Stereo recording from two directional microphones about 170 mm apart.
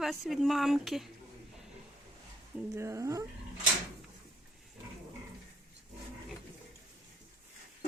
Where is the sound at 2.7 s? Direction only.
15° right (ahead or behind).